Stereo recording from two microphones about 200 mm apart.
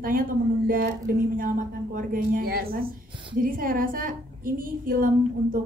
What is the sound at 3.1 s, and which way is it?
Speech, 25° right (ahead or behind).